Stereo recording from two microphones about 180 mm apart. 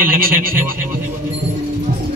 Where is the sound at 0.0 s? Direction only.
55° right (ahead or behind).